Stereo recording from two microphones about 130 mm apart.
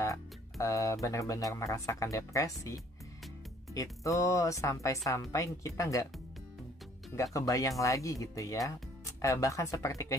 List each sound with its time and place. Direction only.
0.0 s speech: 25° left (ahead or behind)
3.7 s speech: 25° left (ahead or behind)
7.3 s speech: 25° left (ahead or behind)